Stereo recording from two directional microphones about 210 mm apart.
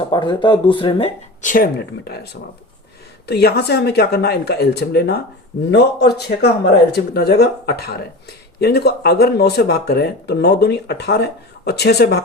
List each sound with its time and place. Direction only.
0.1 s speech: 25° left (ahead or behind); by 12.2 s 50° left (ahead or behind)